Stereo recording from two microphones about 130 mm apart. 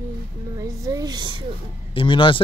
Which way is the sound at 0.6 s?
25° right (ahead or behind).